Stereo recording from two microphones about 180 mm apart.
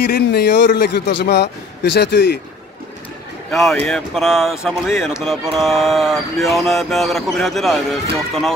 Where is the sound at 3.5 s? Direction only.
5° left (ahead or behind).